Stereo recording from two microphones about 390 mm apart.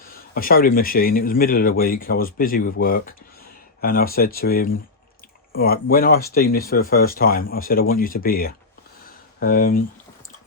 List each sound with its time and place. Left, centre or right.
0.0 s speech: left